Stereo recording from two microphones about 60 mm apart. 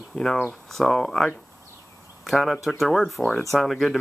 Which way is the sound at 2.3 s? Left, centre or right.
Centre.